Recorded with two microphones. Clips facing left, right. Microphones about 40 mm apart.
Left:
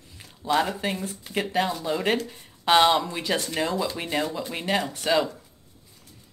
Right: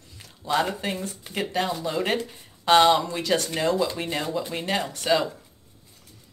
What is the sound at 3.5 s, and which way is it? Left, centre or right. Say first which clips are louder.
Speech: right 2 dB; centre.